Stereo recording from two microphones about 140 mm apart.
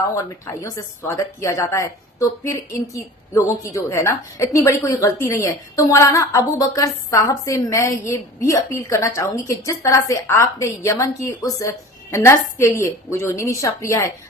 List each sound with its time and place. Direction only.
0.4 s a woman's voice: 20° left (ahead or behind)